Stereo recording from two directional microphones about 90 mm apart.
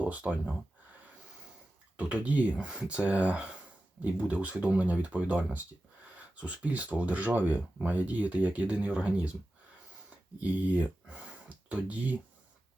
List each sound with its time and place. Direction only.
0.0 s speech: 15° right (ahead or behind)
2.0 s speech: 15° right (ahead or behind)
10.4 s speech: 15° right (ahead or behind)